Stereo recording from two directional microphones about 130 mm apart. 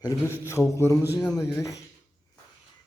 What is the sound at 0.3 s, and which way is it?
Speech, 20° left (ahead or behind).